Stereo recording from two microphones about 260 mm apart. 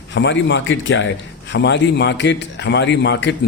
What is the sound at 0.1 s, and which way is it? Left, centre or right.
A man's voice, left.